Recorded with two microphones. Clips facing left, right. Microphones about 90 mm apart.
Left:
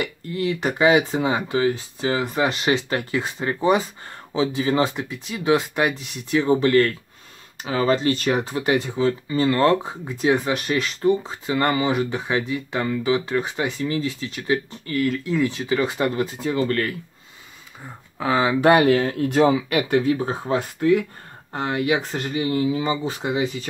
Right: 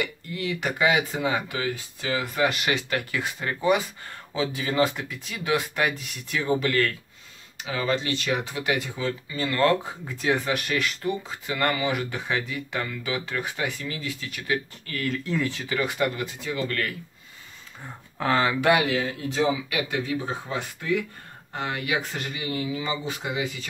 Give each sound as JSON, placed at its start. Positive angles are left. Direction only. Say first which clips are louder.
{"t": 0.0, "sound": "speech", "louder": "left 5 dB", "side_deg": 35}
{"t": 7.6, "sound": "speech", "louder": "left 7 dB", "side_deg": 40}
{"t": 15.0, "sound": "speech", "louder": "left 6 dB", "side_deg": 5}
{"t": 15.4, "sound": "speech", "louder": "left 6 dB", "side_deg": 20}
{"t": 17.8, "sound": "speech", "louder": "left 2 dB", "side_deg": 5}
{"t": 18.6, "sound": "speech", "louder": "left 6 dB", "side_deg": 40}